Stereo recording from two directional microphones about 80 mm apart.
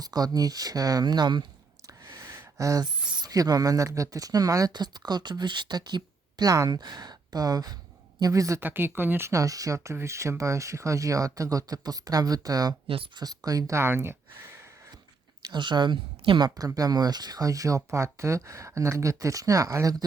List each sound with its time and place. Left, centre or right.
0.0 s speech: right
2.6 s speech: right
2.8 s speech: right
4.7 s speech: right
8.2 s speech: right
8.6 s speech: right
9.3 s speech: right
15.5 s a woman's voice: right
16.6 s speech: right